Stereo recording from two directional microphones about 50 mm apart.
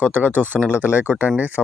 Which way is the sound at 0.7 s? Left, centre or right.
Right.